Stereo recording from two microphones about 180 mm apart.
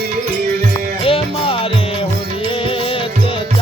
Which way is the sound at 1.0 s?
30° left (ahead or behind).